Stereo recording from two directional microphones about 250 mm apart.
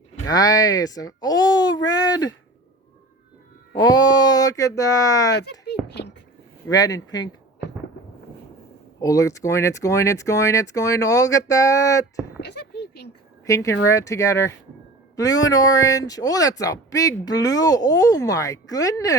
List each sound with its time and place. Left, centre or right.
0.3 s a child's voice: centre
3.8 s speech: centre
5.3 s speech: left
5.9 s a sound: left
6.7 s speech: centre
9.0 s speech: centre
12.4 s a sound: left
13.4 s speech: centre